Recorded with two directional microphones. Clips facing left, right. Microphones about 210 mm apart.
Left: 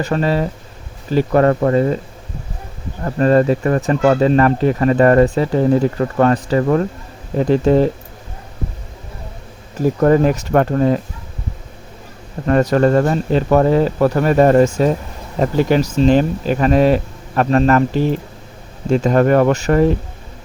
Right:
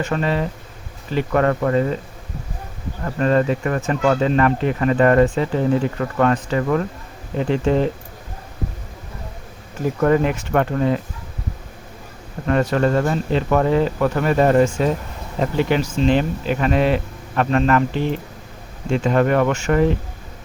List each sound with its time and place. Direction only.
0.0 s speech: 35° left (ahead or behind)
3.0 s speech: 35° left (ahead or behind)
10.0 s speech: 40° left (ahead or behind)
12.5 s speech: 40° left (ahead or behind)